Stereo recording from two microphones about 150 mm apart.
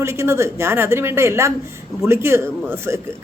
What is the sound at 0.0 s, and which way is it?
A man's voice, 20° right (ahead or behind).